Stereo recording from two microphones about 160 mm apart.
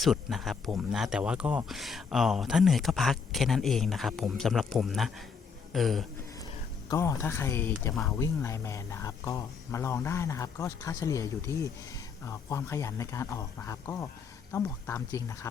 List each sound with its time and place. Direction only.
0.0 s speech: centre (ahead or behind)
6.4 s a sound: 25° left (ahead or behind)
8.1 s speech: 20° left (ahead or behind)